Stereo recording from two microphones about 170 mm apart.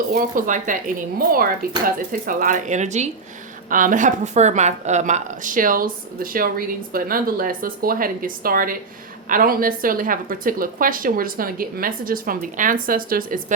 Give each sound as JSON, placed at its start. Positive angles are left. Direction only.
{"t": 0.1, "sound": "a woman's voice", "side_deg": -50}